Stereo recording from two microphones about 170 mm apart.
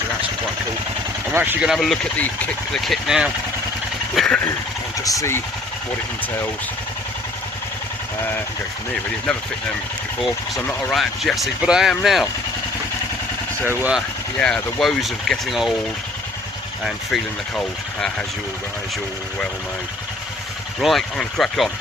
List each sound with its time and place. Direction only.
1.3 s speech: 10° right (ahead or behind)
4.9 s speech: 20° left (ahead or behind)
10.2 s speech: centre (ahead or behind)
10.7 s speech: 10° left (ahead or behind)
10.9 s speech: centre (ahead or behind)
13.7 s speech: 10° right (ahead or behind)
14.3 s speech: 5° left (ahead or behind)
16.8 s speech: 5° left (ahead or behind)
20.8 s speech: centre (ahead or behind)